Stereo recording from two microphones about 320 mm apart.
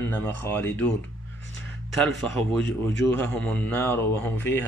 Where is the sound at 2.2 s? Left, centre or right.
Centre.